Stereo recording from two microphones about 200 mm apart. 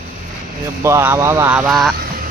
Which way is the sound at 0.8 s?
15° right (ahead or behind).